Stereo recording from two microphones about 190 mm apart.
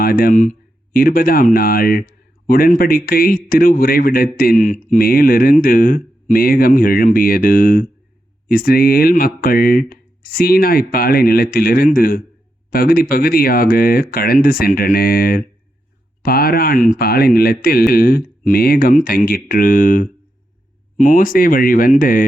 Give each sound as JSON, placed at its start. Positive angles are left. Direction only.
{"t": 0.0, "sound": "speech", "side_deg": 50}